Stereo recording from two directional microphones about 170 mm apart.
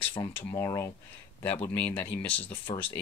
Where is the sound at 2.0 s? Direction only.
10° left (ahead or behind).